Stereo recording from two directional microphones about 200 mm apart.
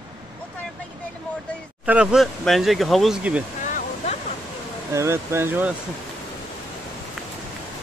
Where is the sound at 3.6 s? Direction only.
40° left (ahead or behind).